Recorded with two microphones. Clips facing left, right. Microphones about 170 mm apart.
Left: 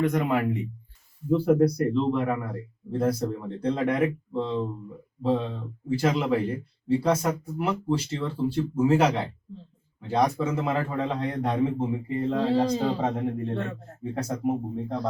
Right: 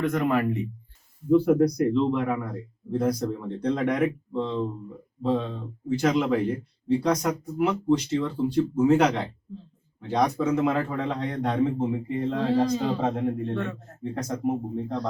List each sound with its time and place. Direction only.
0.0 s a man's voice: 10° left (ahead or behind)
13.5 s speech: 35° left (ahead or behind)
14.0 s speech: 10° left (ahead or behind)